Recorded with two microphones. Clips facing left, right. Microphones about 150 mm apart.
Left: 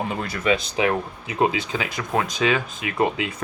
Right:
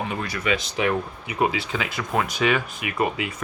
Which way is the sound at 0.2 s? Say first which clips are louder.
Left 3 dB; 25° left (ahead or behind).